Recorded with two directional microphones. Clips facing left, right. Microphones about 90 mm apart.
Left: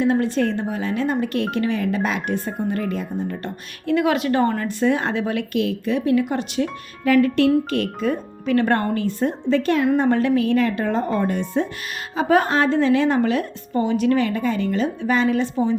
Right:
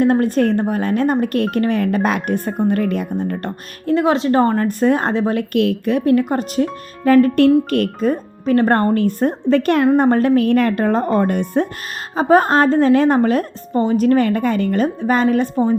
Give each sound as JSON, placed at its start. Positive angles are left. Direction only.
{"t": 0.0, "sound": "a woman's voice", "side_deg": -50}
{"t": 3.8, "sound": "a woman's voice", "side_deg": -30}
{"t": 5.5, "sound": "a woman's voice", "side_deg": -60}
{"t": 7.4, "sound": "a woman's voice", "side_deg": -55}
{"t": 10.0, "sound": "a woman's voice", "side_deg": -45}
{"t": 12.1, "sound": "a woman's voice", "side_deg": -40}